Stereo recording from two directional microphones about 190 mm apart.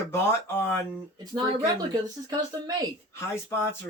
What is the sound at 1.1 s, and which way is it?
Speech, 20° right (ahead or behind).